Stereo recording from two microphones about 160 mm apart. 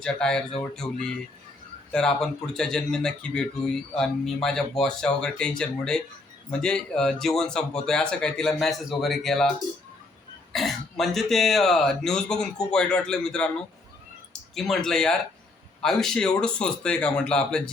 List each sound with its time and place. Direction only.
0.0 s a man's voice: 5° left (ahead or behind)
10.5 s a man's voice: centre (ahead or behind)
14.5 s a man's voice: centre (ahead or behind)